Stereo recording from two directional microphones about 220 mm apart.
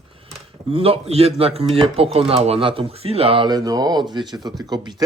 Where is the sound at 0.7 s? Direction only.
25° right (ahead or behind).